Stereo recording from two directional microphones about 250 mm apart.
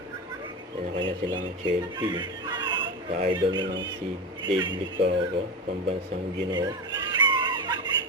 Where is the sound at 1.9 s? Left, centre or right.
Centre.